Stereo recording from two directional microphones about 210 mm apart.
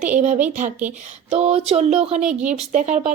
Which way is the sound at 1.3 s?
30° right (ahead or behind).